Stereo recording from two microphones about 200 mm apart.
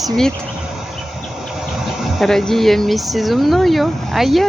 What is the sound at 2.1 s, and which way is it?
Speech, centre (ahead or behind).